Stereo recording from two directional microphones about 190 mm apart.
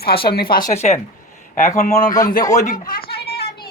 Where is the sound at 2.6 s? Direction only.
45° left (ahead or behind).